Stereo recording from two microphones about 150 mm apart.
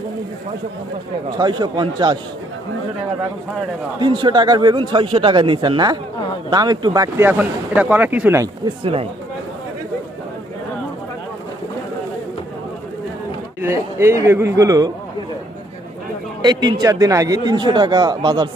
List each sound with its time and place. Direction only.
1.4 s speech: 30° right (ahead or behind)
4.0 s a man's voice: 30° right (ahead or behind)
7.3 s speech: 10° right (ahead or behind)
8.6 s a man's voice: 35° right (ahead or behind)
13.6 s speech: 15° right (ahead or behind)
16.4 s speech: 30° right (ahead or behind)